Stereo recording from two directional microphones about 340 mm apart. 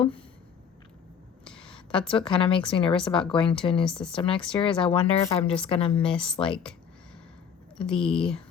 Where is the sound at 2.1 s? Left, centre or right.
Centre.